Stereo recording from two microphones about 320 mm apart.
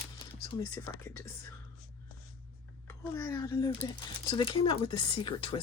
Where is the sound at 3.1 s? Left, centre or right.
Centre.